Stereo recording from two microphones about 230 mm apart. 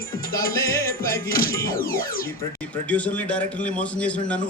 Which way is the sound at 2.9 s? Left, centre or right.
Centre.